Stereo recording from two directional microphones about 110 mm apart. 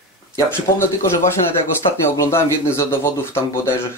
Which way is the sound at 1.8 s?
45° left (ahead or behind).